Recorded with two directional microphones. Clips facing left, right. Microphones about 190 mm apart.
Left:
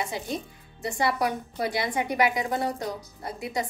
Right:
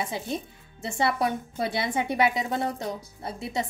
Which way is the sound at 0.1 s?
25° right (ahead or behind).